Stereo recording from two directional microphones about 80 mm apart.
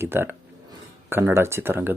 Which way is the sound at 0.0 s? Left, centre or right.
Right.